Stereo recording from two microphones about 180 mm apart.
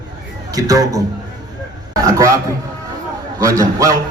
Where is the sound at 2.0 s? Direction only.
15° right (ahead or behind).